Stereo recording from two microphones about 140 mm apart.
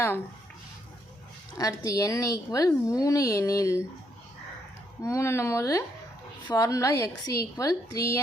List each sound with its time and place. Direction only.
1.5 s a woman's voice: 25° left (ahead or behind)
5.0 s a woman's voice: 20° left (ahead or behind)